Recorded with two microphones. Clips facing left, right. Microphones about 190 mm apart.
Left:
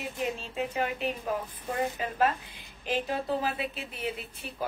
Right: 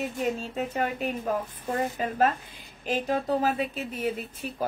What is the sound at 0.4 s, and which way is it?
Speech, 45° right (ahead or behind).